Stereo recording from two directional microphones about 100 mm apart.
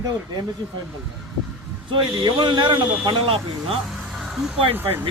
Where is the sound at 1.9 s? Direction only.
50° right (ahead or behind).